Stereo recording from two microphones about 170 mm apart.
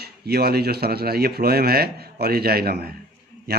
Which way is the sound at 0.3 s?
70° right (ahead or behind).